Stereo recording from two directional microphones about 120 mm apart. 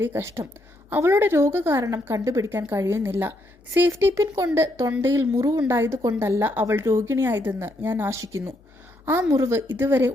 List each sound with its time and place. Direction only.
0.0 s speech: 20° right (ahead or behind)